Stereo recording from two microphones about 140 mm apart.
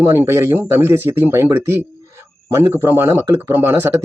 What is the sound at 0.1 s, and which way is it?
Speech, 20° right (ahead or behind).